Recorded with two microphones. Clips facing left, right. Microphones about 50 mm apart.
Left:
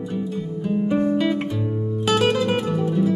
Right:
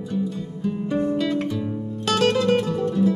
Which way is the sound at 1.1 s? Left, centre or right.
Centre.